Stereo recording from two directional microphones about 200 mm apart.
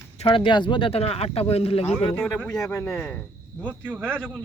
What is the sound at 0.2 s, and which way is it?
Speech, 25° left (ahead or behind).